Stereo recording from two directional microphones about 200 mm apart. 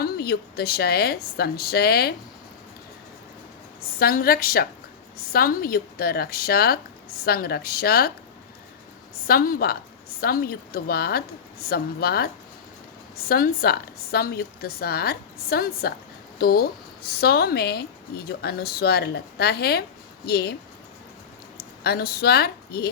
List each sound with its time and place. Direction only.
0.0 s a woman's voice: 50° left (ahead or behind)
3.9 s a woman's voice: 50° left (ahead or behind)
9.2 s a woman's voice: 50° left (ahead or behind)
21.6 s a woman's voice: 50° left (ahead or behind)